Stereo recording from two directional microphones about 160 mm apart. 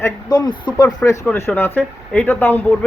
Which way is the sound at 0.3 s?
30° left (ahead or behind).